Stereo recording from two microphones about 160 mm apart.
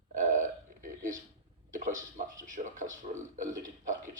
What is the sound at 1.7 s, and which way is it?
A man's voice, 55° right (ahead or behind).